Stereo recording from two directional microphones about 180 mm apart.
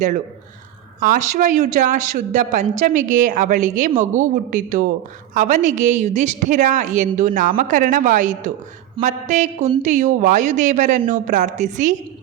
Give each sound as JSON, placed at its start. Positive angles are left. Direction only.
{"t": 0.9, "sound": "a woman's voice", "side_deg": -50}